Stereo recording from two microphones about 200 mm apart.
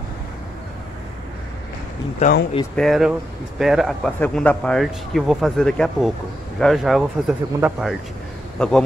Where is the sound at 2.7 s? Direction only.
Centre (ahead or behind).